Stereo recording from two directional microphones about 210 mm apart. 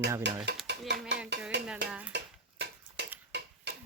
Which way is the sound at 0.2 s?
55° right (ahead or behind).